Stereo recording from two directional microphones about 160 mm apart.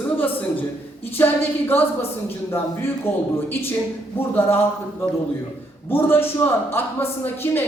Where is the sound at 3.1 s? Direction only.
15° left (ahead or behind).